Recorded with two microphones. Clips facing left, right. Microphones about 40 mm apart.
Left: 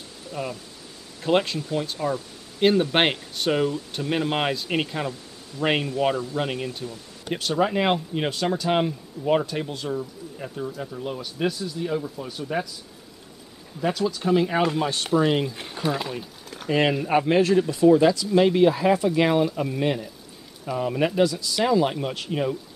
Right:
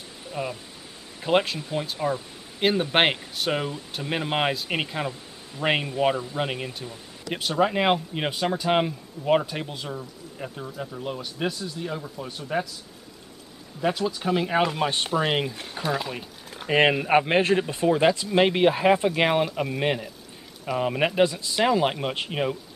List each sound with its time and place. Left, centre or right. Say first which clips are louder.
0.3 s speech: even; centre
13.9 s speech: left 3 dB; centre
15.7 s speech: left 1 dB; centre
16.1 s speech: left 1 dB; centre
16.7 s speech: right 2 dB; right